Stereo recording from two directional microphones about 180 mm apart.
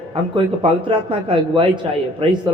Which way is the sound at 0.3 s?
30° right (ahead or behind).